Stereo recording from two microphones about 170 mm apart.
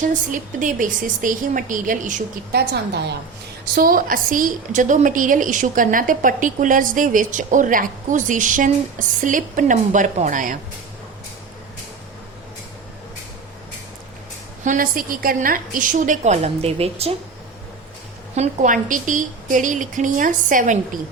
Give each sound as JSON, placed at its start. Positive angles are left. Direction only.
{"t": 0.0, "sound": "a woman's voice", "side_deg": -50}
{"t": 2.5, "sound": "a woman's voice", "side_deg": -75}
{"t": 3.8, "sound": "a woman's voice", "side_deg": -55}
{"t": 14.6, "sound": "a woman's voice", "side_deg": -50}
{"t": 18.3, "sound": "a woman's voice", "side_deg": -50}